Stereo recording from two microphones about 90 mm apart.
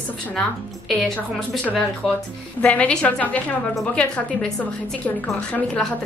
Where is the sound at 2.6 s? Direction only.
15° left (ahead or behind).